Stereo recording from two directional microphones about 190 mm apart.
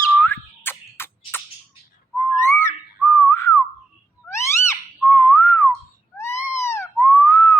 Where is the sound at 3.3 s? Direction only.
15° left (ahead or behind).